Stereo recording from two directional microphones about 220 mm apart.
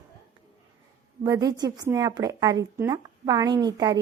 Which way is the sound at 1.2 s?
15° right (ahead or behind).